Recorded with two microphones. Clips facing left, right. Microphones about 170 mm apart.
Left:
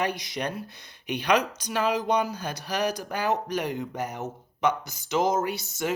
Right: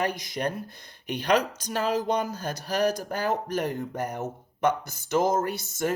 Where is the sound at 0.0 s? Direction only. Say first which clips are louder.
Right 1 dB; 50° right (ahead or behind).